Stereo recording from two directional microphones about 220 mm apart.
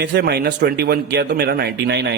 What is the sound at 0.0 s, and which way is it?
A man's voice, 50° right (ahead or behind).